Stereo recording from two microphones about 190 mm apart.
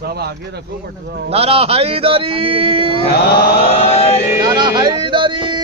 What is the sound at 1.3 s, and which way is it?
A man's voice, 30° right (ahead or behind).